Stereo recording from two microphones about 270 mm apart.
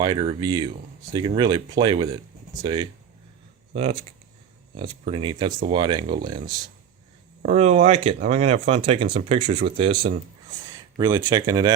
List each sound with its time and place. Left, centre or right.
0.0 s speech: centre
4.8 s speech: centre
7.4 s speech: right